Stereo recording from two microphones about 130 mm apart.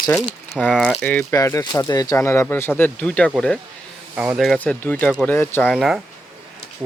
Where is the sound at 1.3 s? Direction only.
25° left (ahead or behind); by 3.3 s 10° left (ahead or behind).